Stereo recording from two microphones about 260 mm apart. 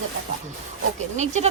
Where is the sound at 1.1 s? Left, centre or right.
Right.